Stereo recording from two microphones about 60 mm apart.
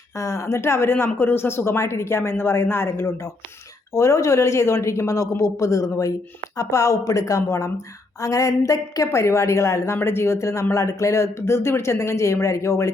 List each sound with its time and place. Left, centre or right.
0.2 s a woman's voice: left
3.9 s a woman's voice: left
6.6 s a woman's voice: left
9.0 s a woman's voice: left